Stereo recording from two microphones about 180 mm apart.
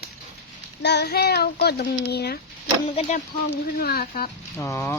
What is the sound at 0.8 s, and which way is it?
A child's voice, 70° left (ahead or behind).